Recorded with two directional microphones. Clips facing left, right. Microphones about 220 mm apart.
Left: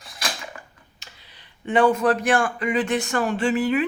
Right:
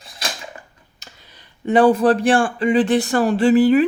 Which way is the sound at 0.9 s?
45° right (ahead or behind).